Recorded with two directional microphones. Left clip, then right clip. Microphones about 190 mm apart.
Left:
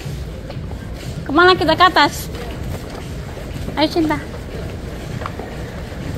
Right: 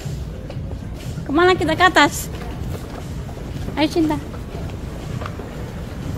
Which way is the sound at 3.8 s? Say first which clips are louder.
Left 2 dB; 25° right (ahead or behind).